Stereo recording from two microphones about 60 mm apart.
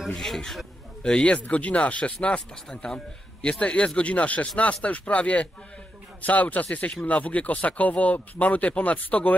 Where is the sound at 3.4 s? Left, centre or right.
Centre.